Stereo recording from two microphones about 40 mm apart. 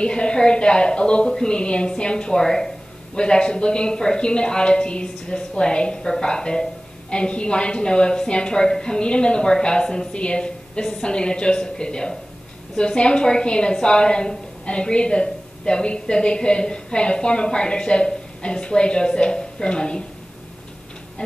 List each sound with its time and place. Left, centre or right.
0.0 s a woman's voice: left